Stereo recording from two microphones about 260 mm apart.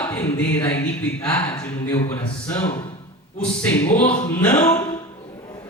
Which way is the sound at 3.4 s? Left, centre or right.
Centre.